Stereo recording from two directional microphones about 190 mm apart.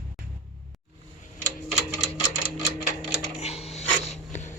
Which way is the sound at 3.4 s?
35° left (ahead or behind).